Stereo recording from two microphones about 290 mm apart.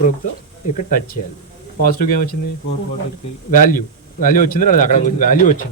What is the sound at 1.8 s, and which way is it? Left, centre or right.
Speech, left.